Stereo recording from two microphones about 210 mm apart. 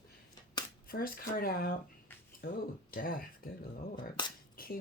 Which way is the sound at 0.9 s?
45° left (ahead or behind).